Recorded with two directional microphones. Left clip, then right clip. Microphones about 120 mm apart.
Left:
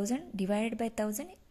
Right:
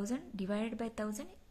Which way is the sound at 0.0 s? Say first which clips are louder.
Left 5 dB; 20° left (ahead or behind).